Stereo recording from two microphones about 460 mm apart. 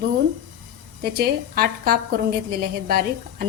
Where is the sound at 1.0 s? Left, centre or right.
Centre.